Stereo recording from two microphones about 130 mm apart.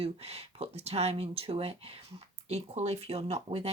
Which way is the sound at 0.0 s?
50° right (ahead or behind).